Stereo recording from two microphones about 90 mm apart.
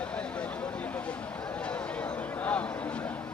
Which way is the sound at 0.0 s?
15° left (ahead or behind).